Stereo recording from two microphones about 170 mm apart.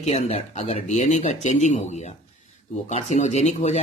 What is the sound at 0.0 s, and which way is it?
Speech, 40° left (ahead or behind).